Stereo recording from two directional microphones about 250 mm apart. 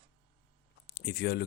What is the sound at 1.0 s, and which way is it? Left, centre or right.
Speech, left.